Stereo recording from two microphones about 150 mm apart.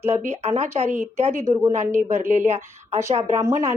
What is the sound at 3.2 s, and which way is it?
Speech, 20° right (ahead or behind).